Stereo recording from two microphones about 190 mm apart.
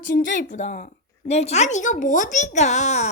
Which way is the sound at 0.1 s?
40° left (ahead or behind).